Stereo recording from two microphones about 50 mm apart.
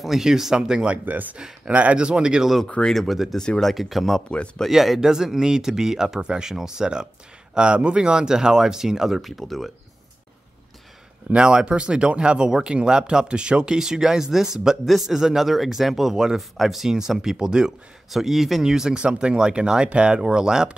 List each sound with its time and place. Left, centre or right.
0.0 s speech: centre
1.0 s speech: right
1.4 s speech: right
2.9 s speech: centre
3.3 s speech: centre
3.7 s speech: centre
11.2 s speech: right
18.1 s speech: centre